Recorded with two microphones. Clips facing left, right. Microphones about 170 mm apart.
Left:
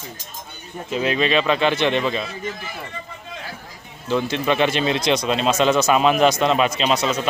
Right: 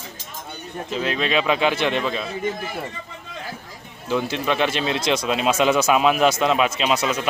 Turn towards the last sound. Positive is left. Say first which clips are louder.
# left 1 dB
turn(degrees=-10)  # may be behind; listen again after turning